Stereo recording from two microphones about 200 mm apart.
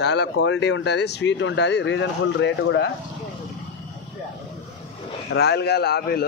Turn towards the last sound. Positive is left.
turn(degrees=55)  # may be behind; listen again after turning